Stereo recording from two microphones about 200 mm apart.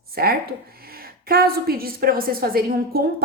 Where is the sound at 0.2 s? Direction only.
50° right (ahead or behind).